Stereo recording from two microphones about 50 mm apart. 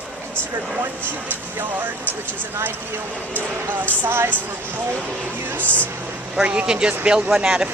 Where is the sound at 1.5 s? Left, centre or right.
Right.